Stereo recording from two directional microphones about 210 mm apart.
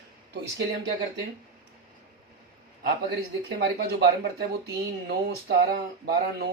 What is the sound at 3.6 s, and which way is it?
Speech, 50° right (ahead or behind).